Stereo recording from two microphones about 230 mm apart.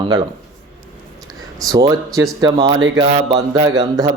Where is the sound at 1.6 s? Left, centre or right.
Centre.